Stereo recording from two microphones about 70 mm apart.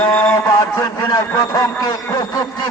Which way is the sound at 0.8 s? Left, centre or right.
Left.